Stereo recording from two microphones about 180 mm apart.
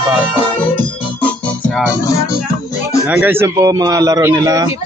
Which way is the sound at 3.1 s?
10° right (ahead or behind).